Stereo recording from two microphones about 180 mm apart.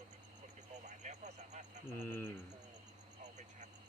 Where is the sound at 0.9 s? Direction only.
40° right (ahead or behind).